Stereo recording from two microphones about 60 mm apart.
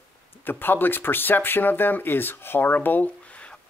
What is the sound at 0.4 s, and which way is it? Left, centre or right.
Speech, left.